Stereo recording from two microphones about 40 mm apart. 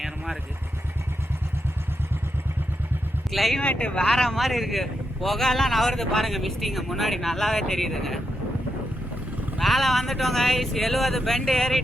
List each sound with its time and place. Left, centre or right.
3.3 s speech: centre
3.6 s speech: left
4.1 s speech: centre
9.6 s speech: centre